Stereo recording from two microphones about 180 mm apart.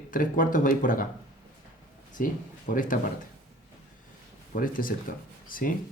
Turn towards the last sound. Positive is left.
turn(degrees=50)  # may be behind; listen again after turning